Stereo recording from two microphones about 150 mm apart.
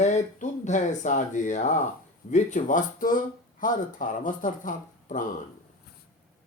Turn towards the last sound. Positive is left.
turn(degrees=60)  # may be behind; listen again after turning